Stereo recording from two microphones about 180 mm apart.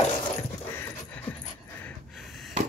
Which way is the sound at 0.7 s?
10° left (ahead or behind).